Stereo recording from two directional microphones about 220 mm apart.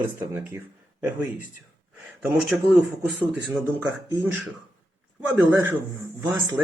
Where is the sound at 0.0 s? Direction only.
10° right (ahead or behind).